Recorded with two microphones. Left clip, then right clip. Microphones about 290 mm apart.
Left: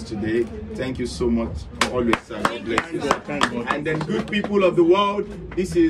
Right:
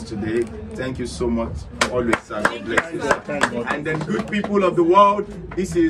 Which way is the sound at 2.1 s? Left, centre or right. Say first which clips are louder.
Right 2 dB; centre.